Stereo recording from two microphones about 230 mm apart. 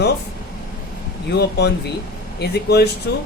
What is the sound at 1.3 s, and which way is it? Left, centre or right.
Speech, left.